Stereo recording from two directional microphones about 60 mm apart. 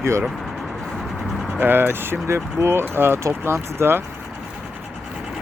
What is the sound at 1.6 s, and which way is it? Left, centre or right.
Speech, right.